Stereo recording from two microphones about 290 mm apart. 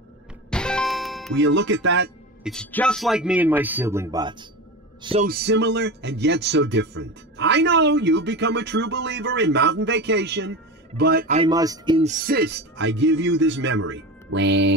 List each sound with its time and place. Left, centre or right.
0.5 s music: centre
1.3 s a man's voice: right
2.4 s a man's voice: centre
5.3 s a man's voice: right; by 12.1 s centre
12.1 s a man's voice: right